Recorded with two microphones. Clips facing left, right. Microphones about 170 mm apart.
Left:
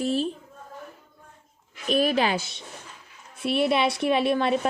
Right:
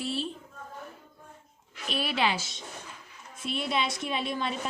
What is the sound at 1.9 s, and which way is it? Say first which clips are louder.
Speech: left 7 dB; 45° left (ahead or behind).